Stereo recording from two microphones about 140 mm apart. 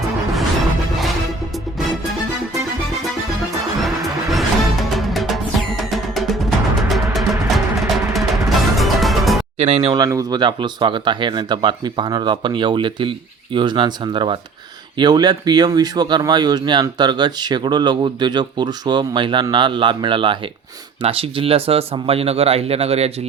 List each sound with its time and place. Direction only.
3.8 s music: centre (ahead or behind)
9.6 s speech: 50° right (ahead or behind)
10.1 s speech: 25° right (ahead or behind); by 23.1 s 45° right (ahead or behind)